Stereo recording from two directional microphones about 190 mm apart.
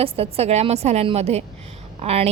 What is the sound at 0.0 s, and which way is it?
Speech, 30° right (ahead or behind).